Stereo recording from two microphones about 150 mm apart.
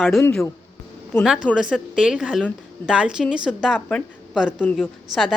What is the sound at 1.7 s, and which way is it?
A woman's voice, 5° right (ahead or behind).